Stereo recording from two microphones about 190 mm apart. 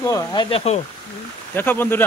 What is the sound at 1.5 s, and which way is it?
Speech, 10° left (ahead or behind).